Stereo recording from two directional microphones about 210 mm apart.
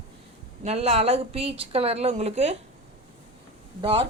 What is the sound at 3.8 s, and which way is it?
Speech, 20° right (ahead or behind).